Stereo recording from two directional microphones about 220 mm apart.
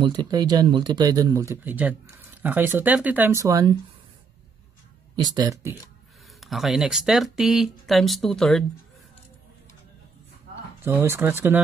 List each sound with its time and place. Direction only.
0.0 s speech: 20° right (ahead or behind)
5.1 s speech: 20° right (ahead or behind)
6.4 s speech: centre (ahead or behind)
10.8 s speech: 10° right (ahead or behind)